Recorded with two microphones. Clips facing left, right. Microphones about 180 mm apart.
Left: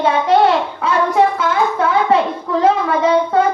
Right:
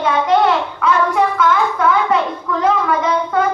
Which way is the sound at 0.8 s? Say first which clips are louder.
Left 1 dB; 30° left (ahead or behind).